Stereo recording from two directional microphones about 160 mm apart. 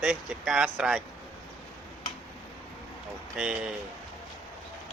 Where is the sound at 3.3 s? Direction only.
5° right (ahead or behind).